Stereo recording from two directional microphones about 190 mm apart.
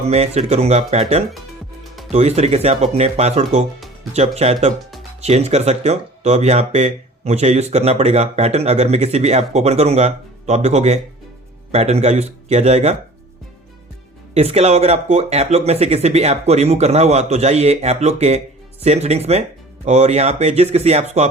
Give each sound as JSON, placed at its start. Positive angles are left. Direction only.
{"t": 0.1, "sound": "speech", "side_deg": -35}
{"t": 14.3, "sound": "speech", "side_deg": -35}